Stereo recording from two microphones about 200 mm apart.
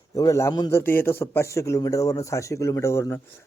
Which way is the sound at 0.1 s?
15° left (ahead or behind).